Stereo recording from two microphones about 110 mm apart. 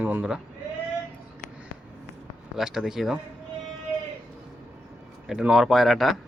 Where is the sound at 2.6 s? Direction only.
5° right (ahead or behind).